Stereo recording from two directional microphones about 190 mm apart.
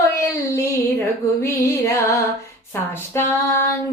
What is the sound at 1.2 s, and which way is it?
Music, 15° left (ahead or behind).